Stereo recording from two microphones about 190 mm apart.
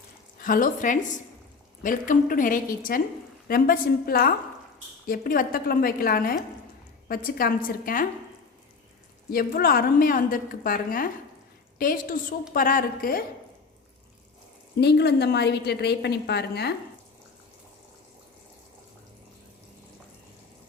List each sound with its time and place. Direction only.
0.4 s a woman's voice: 45° left (ahead or behind)
9.3 s a woman's voice: 50° left (ahead or behind)
14.8 s a woman's voice: 60° left (ahead or behind)